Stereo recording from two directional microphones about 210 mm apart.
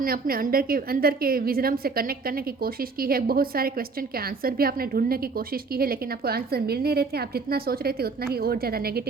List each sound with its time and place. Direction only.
0.0 s a woman's voice: 45° right (ahead or behind)